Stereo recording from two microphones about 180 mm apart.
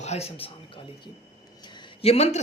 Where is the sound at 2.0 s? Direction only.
35° left (ahead or behind).